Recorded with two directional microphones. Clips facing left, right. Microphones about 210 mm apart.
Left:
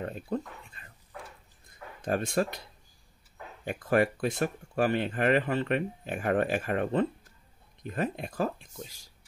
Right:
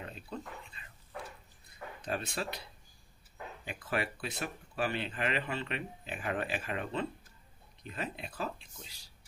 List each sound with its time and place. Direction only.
0.0 s speech: 50° left (ahead or behind)
2.0 s speech: 50° left (ahead or behind)
3.6 s speech: 50° left (ahead or behind)